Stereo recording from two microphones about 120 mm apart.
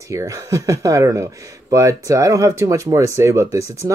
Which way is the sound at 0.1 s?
25° right (ahead or behind).